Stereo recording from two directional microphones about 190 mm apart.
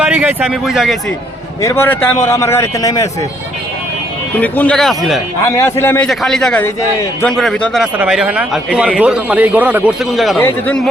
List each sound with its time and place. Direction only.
0.0 s a man's voice: 5° right (ahead or behind)
1.6 s a man's voice: 10° left (ahead or behind)
4.4 s a man's voice: 10° left (ahead or behind)
5.5 s a man's voice: 15° left (ahead or behind)